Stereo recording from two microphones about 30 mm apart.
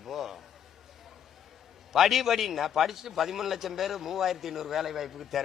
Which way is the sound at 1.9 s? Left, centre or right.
Centre.